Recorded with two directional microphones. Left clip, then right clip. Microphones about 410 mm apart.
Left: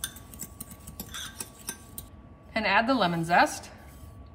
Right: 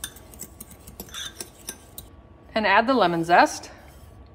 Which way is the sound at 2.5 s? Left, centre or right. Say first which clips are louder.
Right 5 dB; centre.